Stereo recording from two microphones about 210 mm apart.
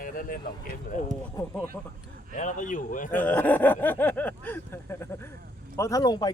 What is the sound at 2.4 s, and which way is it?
Speech, 35° left (ahead or behind).